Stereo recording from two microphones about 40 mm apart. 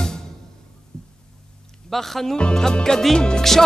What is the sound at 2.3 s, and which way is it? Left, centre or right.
Music, left.